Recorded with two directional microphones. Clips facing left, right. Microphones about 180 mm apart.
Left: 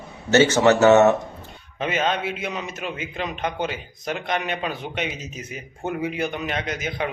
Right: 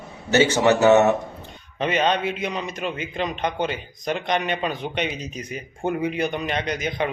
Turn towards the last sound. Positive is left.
turn(degrees=5)  # may be behind; listen again after turning